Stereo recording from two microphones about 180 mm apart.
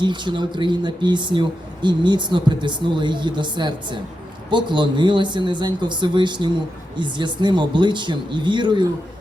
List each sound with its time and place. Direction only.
0.0 s speech: 25° right (ahead or behind)